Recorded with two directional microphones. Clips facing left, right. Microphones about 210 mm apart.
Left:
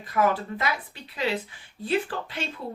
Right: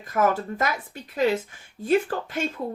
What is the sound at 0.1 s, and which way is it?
A woman's voice, 45° right (ahead or behind).